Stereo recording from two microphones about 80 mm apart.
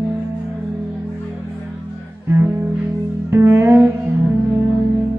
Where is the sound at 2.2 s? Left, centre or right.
Right.